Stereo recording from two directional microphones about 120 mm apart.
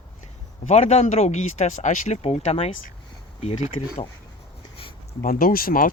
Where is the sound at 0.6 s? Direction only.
70° left (ahead or behind).